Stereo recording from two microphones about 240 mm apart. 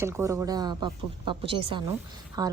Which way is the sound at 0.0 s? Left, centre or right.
Centre.